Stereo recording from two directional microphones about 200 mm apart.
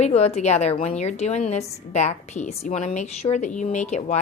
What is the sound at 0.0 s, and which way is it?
A woman's voice, 30° left (ahead or behind).